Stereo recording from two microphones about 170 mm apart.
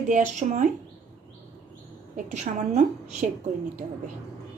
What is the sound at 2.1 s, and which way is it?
A woman's voice, 45° right (ahead or behind).